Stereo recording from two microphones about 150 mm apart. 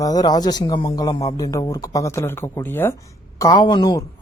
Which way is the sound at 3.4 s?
25° left (ahead or behind).